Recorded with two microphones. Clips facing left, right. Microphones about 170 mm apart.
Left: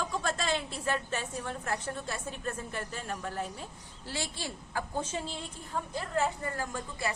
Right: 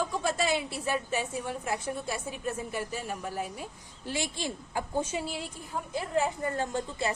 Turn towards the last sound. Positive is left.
turn(degrees=-25)  # may be behind; listen again after turning